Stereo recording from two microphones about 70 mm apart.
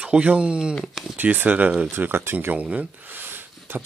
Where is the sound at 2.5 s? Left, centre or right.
Right.